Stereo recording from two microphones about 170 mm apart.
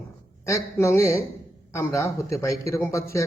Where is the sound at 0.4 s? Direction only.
15° left (ahead or behind).